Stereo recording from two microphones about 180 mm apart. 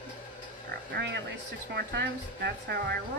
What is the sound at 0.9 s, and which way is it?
Speech, 80° right.